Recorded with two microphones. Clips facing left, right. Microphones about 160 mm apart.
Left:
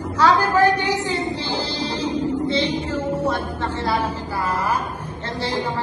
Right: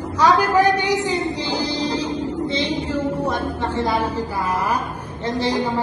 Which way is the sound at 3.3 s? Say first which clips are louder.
Right 1 dB; 15° right (ahead or behind).